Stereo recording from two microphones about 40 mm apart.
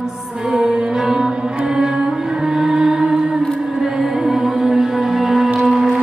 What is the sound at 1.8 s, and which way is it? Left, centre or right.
Music, centre.